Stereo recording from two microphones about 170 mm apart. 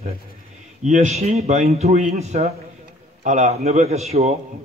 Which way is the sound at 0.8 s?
40° right (ahead or behind).